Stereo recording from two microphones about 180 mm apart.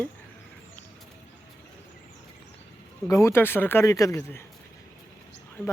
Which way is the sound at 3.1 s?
15° left (ahead or behind).